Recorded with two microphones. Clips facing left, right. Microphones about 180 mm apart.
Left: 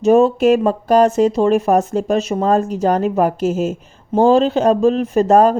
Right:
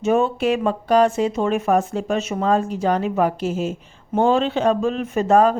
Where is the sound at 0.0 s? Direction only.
35° left (ahead or behind).